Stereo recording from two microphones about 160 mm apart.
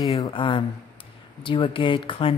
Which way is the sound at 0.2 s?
30° left (ahead or behind).